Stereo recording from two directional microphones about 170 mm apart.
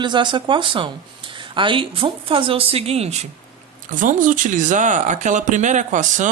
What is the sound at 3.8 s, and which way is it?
Speech, 50° right (ahead or behind).